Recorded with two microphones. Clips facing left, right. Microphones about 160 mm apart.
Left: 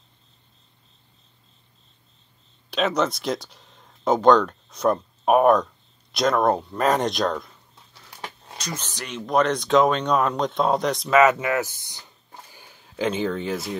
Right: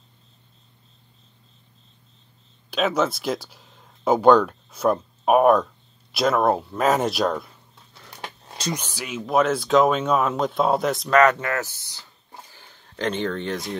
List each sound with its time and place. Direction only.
2.7 s speech: 5° right (ahead or behind)
8.2 s a sound: 25° right (ahead or behind)
8.7 s speech: 10° right (ahead or behind)